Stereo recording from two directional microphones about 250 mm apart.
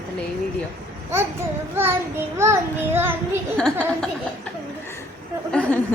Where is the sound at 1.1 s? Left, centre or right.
Centre.